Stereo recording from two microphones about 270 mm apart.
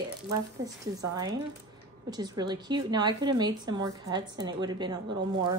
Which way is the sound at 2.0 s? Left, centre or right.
Centre.